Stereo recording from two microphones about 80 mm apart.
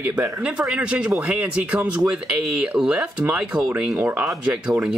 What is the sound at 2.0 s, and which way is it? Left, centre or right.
Speech, centre.